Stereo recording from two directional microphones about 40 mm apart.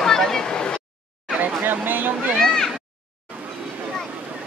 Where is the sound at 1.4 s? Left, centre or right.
Right.